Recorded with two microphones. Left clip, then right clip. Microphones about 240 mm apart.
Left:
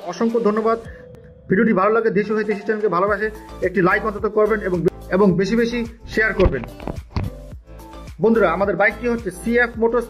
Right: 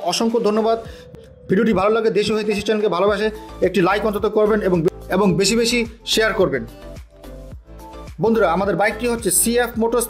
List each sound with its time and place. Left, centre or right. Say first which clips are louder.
0.1 s a man's voice: even; right
8.2 s speech: even; right